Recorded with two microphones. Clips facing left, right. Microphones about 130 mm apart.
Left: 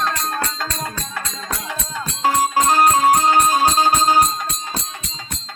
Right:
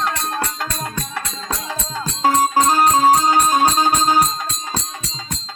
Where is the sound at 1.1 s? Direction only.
30° right (ahead or behind).